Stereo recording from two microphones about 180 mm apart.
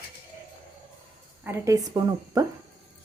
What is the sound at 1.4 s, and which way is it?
A woman's voice, 15° right (ahead or behind).